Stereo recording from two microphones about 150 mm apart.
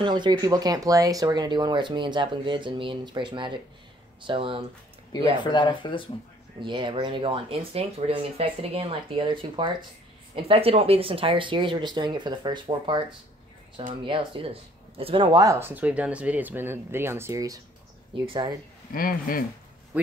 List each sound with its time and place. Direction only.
0.0 s speech: 30° right (ahead or behind)
5.4 s speech: 30° left (ahead or behind)
6.6 s speech: 35° right (ahead or behind)
14.0 s speech: 35° right (ahead or behind)
18.1 s speech: 35° right (ahead or behind)
18.9 s speech: 70° left (ahead or behind)